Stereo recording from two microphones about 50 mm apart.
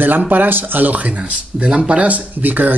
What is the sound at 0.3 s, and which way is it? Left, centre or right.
Speech, right.